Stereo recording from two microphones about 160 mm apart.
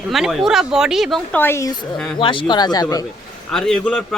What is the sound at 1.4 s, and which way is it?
Speech, 15° left (ahead or behind).